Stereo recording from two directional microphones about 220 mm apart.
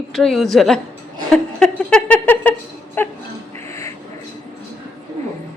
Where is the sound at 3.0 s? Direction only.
10° left (ahead or behind).